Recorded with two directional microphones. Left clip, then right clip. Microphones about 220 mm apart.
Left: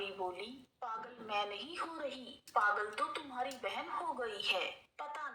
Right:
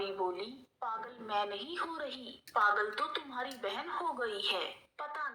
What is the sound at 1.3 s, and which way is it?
Speech, 50° right (ahead or behind).